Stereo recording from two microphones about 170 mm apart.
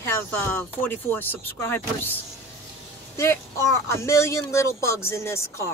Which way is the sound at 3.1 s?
15° left (ahead or behind).